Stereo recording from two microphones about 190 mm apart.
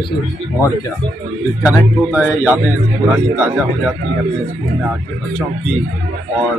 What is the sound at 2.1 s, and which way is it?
Speech, 5° right (ahead or behind).